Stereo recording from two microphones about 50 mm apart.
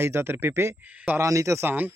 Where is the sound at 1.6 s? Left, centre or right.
Right.